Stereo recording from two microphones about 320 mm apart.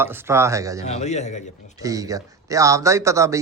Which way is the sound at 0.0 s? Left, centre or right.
Centre.